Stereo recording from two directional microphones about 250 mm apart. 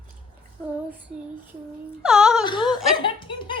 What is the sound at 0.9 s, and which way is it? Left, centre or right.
Child singing, centre.